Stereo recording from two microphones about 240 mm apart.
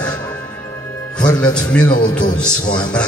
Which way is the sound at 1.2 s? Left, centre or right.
Centre.